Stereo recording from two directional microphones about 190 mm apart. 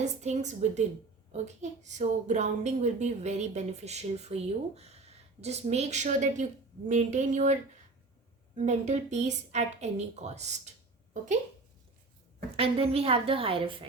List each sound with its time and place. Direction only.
0.0 s a woman's voice: 35° right (ahead or behind)
12.5 s a woman's voice: 30° right (ahead or behind)